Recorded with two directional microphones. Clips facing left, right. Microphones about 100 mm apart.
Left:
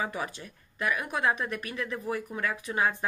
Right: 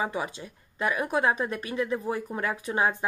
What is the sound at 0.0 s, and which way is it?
Speech, 20° right (ahead or behind).